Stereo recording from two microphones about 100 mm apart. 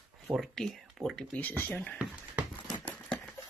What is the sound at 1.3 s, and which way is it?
Speech, 15° left (ahead or behind).